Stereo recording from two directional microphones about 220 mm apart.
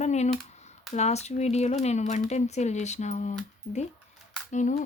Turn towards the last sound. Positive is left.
turn(degrees=35)  # may be behind; listen again after turning